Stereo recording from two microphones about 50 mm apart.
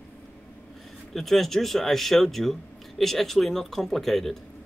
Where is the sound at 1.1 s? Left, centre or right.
Centre.